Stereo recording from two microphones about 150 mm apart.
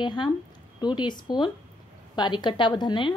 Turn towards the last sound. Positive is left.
turn(degrees=30)  # may be behind; listen again after turning